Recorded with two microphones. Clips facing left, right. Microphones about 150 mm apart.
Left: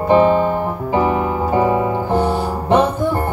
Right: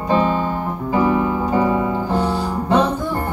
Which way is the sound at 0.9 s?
20° left (ahead or behind).